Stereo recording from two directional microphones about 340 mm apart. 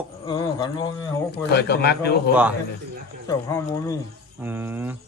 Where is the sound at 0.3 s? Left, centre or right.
Centre.